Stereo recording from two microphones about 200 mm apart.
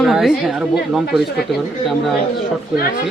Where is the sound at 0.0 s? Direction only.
Centre (ahead or behind).